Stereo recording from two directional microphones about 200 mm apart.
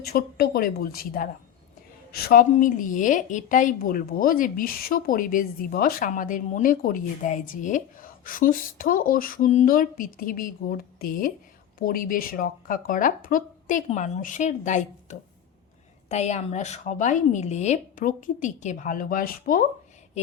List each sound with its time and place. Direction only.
0.0 s a woman's voice: 50° left (ahead or behind)